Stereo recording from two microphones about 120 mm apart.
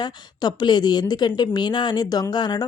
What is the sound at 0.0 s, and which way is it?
Speech, 35° left (ahead or behind).